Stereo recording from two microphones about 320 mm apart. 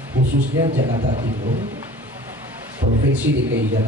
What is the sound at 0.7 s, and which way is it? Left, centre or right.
Speech, right.